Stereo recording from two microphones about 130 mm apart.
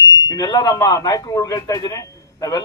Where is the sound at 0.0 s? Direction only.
30° left (ahead or behind).